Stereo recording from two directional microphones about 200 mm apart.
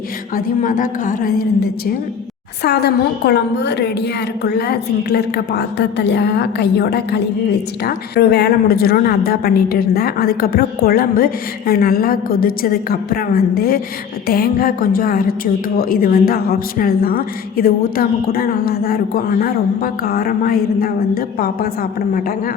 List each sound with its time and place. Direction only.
0.3 s a woman's voice: 40° left (ahead or behind)
2.6 s a woman's voice: 55° left (ahead or behind)